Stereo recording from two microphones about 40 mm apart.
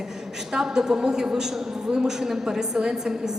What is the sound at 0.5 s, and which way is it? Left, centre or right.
A woman's voice, centre.